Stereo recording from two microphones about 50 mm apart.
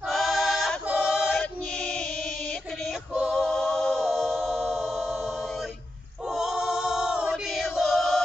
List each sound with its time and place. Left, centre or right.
0.1 s a sound: centre
1.0 s choir: centre
1.8 s chant: centre
3.3 s a capella: centre
4.6 s music: centre
6.2 s choir: centre
7.4 s choir: centre